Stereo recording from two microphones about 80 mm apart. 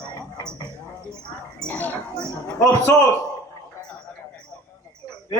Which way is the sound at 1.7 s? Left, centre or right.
Left.